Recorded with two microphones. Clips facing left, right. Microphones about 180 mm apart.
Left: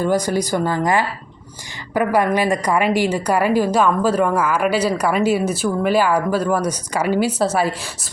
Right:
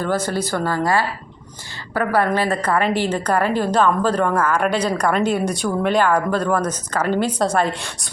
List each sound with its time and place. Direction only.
0.0 s a woman's voice: 15° left (ahead or behind)
1.9 s a woman's voice: 15° left (ahead or behind)